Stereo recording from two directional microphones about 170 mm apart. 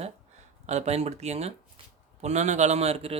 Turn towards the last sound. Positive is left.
turn(degrees=-35)  # may be behind; listen again after turning